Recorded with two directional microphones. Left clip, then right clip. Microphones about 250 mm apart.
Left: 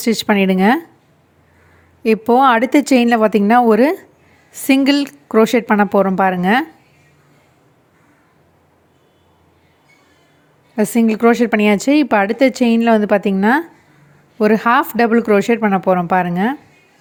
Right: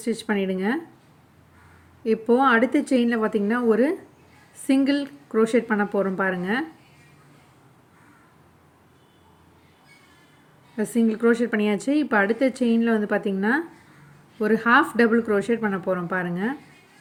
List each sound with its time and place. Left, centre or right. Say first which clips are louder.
0.0 s speech: left 10 dB; left
2.0 s speech: left 8 dB; left
10.8 s speech: left 8 dB; left